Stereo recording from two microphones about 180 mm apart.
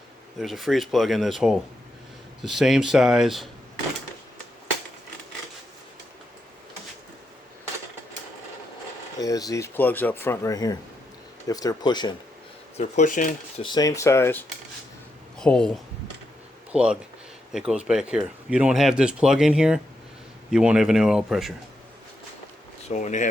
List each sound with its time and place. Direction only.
0.3 s speech: centre (ahead or behind)
9.1 s speech: 20° left (ahead or behind)
12.7 s speech: 40° left (ahead or behind)
13.7 s speech: 20° left (ahead or behind); by 15.7 s 5° left (ahead or behind)
16.7 s speech: 5° right (ahead or behind)
22.9 s speech: 40° left (ahead or behind)